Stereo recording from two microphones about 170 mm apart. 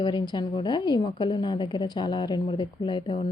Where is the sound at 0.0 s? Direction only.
25° left (ahead or behind).